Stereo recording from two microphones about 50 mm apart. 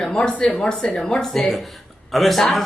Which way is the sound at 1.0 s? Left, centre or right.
Centre.